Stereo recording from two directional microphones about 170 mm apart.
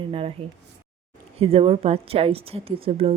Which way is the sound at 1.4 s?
35° right (ahead or behind).